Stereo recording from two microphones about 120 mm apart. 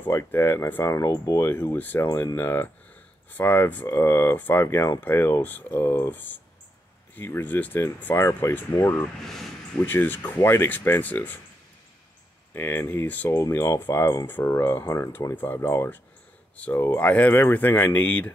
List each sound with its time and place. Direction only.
0.0 s speech: 20° left (ahead or behind)
12.5 s speech: 15° left (ahead or behind)
13.4 s speech: 25° left (ahead or behind)